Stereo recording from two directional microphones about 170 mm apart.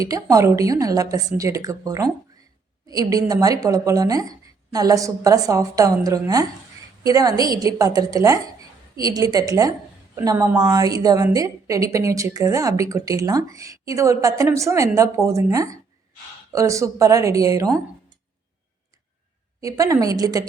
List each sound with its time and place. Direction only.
0.0 s a woman's voice: 20° right (ahead or behind)
19.6 s speech: 20° right (ahead or behind)